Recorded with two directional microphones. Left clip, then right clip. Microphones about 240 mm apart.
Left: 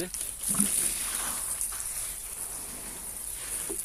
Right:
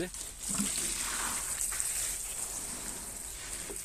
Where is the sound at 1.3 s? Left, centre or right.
Centre.